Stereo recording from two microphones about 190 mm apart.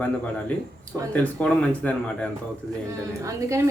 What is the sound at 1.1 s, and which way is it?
Speech, 5° left (ahead or behind).